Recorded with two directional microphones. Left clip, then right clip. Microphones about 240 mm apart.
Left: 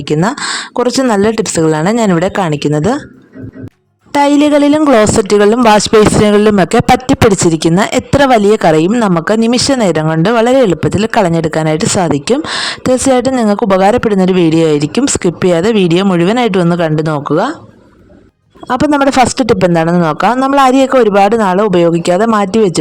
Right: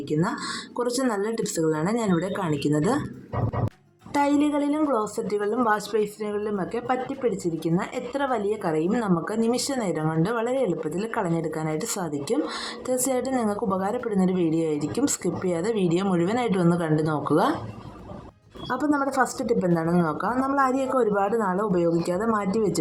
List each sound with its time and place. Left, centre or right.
0.1 s speech: left
4.1 s speech: left
18.7 s speech: left